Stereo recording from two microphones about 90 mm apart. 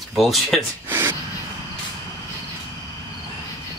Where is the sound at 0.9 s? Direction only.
25° right (ahead or behind).